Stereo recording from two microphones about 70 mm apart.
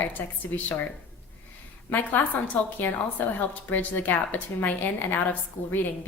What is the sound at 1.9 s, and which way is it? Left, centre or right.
A woman's voice, left.